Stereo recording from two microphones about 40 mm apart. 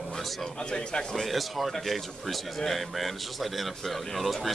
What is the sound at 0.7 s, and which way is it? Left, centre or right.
Speech, centre.